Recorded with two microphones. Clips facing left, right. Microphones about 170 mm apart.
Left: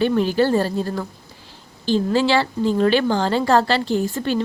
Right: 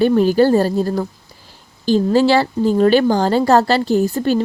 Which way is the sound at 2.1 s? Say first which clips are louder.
Right 5 dB; 40° right (ahead or behind).